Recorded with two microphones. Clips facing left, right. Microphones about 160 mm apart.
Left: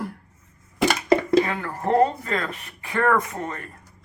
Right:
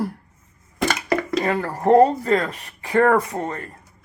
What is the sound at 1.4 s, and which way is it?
Speech, 40° right (ahead or behind).